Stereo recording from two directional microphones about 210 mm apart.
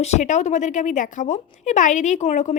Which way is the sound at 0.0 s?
35° left (ahead or behind).